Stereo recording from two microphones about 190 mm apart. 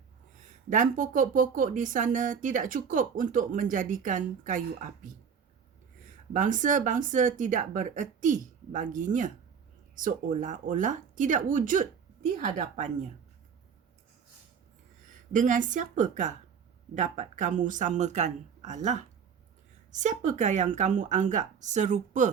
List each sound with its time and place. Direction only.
0.7 s speech: 45° right (ahead or behind)
6.3 s speech: 40° right (ahead or behind)
15.3 s speech: 40° right (ahead or behind)